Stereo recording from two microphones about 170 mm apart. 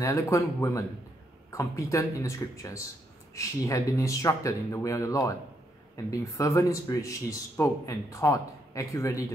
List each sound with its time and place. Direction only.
0.0 s speech: 15° left (ahead or behind)